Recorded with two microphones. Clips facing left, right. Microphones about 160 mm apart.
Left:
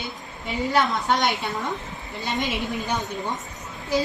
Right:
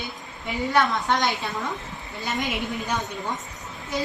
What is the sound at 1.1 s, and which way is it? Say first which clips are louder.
A woman's voice: left 1 dB; 20° left (ahead or behind).